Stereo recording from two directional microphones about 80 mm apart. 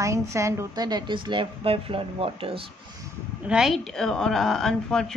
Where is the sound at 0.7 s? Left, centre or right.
Right.